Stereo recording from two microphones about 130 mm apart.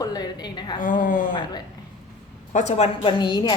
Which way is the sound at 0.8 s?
90° left.